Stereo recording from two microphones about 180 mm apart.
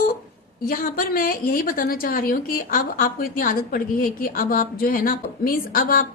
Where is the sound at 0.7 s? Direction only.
50° left (ahead or behind).